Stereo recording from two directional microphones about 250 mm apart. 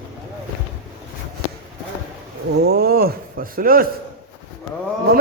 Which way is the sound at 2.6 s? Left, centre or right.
Right.